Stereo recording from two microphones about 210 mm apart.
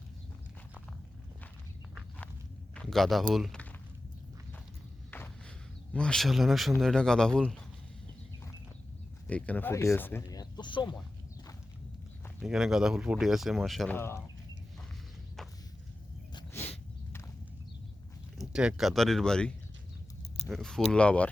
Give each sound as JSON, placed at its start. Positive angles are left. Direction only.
{"t": 2.7, "sound": "a sound", "side_deg": 0}
{"t": 5.1, "sound": "walk", "side_deg": 10}
{"t": 5.9, "sound": "speech", "side_deg": 5}
{"t": 9.2, "sound": "speech", "side_deg": 5}
{"t": 10.6, "sound": "speech", "side_deg": 20}
{"t": 12.4, "sound": "speech", "side_deg": 0}
{"t": 15.4, "sound": "walk", "side_deg": 0}
{"t": 18.3, "sound": "speech", "side_deg": 0}